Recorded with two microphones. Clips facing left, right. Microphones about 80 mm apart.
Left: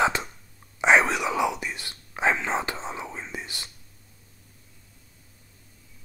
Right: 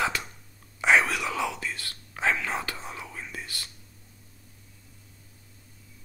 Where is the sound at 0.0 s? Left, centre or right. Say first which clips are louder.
Left 5 dB; left.